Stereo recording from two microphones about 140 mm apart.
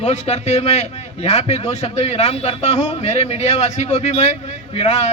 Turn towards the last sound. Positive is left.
turn(degrees=55)  # may be behind; listen again after turning